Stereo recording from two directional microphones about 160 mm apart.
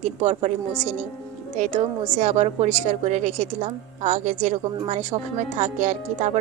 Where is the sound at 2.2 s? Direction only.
50° right (ahead or behind).